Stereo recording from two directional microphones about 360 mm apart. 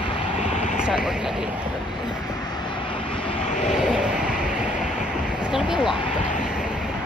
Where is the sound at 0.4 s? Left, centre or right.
Centre.